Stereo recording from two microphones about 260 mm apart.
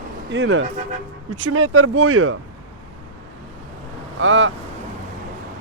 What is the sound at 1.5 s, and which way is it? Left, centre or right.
Speech, right.